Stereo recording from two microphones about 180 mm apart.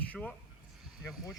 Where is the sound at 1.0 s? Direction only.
20° left (ahead or behind).